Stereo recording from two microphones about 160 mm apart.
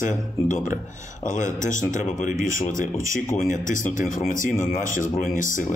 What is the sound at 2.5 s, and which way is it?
Speech, 55° left (ahead or behind).